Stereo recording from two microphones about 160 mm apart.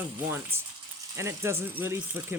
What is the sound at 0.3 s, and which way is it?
Speech, 15° right (ahead or behind).